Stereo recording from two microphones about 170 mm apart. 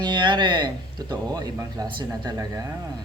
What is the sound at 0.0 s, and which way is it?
Speech, 25° right (ahead or behind).